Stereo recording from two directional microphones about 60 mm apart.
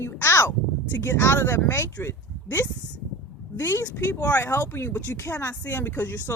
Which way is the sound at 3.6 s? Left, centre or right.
Left.